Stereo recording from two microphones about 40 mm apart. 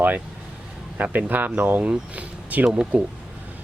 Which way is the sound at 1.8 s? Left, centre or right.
Right.